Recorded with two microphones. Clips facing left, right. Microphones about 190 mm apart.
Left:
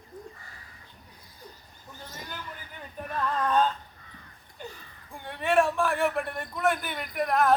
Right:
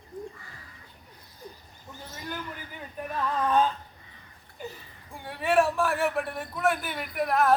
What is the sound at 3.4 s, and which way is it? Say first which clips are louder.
Speech: right 1 dB; 5° right (ahead or behind).